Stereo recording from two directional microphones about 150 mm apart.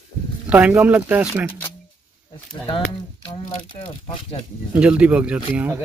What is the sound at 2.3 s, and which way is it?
Speech, 35° left (ahead or behind).